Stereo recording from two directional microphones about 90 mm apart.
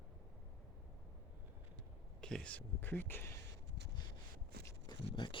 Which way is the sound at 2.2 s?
10° left (ahead or behind).